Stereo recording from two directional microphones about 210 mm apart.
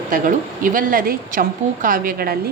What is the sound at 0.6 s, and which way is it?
A woman's voice, 40° right (ahead or behind).